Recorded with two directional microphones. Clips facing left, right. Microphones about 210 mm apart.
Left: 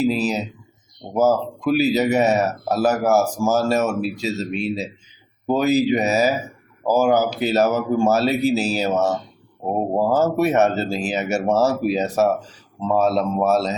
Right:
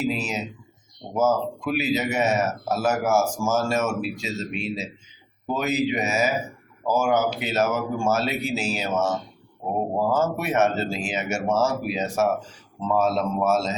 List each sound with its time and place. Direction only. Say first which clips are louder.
0.1 s speech: left 6 dB; 35° left (ahead or behind)
10.2 s speech: left 6 dB; 40° left (ahead or behind)